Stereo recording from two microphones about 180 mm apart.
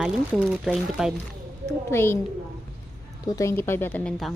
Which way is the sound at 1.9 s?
15° left (ahead or behind).